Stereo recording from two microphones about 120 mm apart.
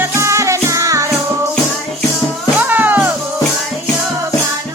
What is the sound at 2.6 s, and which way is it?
Music, 15° right (ahead or behind).